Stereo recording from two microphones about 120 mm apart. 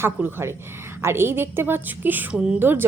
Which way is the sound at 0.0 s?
20° right (ahead or behind).